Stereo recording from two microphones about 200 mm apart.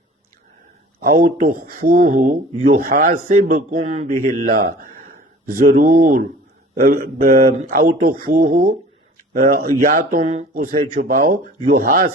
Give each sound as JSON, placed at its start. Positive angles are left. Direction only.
{"t": 0.9, "sound": "speech", "side_deg": -45}